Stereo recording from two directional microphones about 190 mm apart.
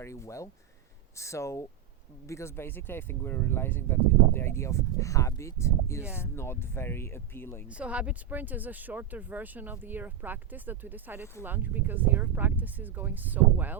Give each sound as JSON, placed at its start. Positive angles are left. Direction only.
{"t": 0.0, "sound": "speech", "side_deg": 15}
{"t": 7.7, "sound": "speech", "side_deg": -5}